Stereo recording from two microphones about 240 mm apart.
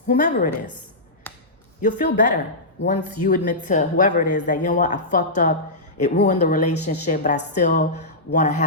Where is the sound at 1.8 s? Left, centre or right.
Left.